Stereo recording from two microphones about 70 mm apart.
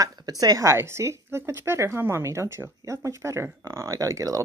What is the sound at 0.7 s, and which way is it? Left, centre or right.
Speech, right.